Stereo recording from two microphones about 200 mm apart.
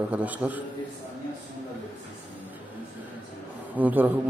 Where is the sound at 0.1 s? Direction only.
5° right (ahead or behind).